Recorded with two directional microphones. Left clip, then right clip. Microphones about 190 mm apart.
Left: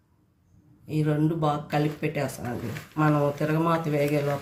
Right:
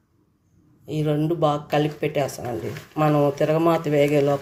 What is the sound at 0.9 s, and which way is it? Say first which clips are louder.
Speech: right 3 dB; 45° right (ahead or behind).